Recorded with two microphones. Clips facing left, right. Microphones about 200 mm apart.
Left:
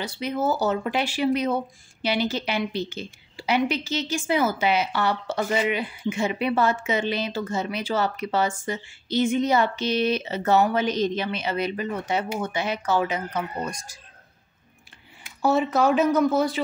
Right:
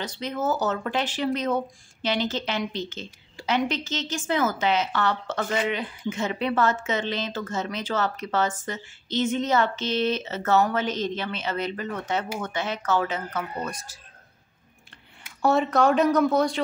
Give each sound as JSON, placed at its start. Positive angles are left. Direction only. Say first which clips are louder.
{"t": 0.0, "sound": "speech", "louder": "left 2 dB", "side_deg": 10}
{"t": 15.4, "sound": "speech", "louder": "even", "side_deg": 0}